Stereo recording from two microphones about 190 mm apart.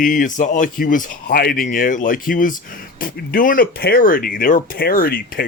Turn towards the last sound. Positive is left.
turn(degrees=50)  # may be behind; listen again after turning